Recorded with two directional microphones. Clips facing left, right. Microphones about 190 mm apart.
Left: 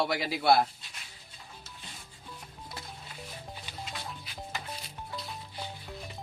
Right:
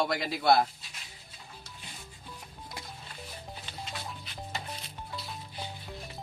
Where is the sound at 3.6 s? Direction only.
5° left (ahead or behind).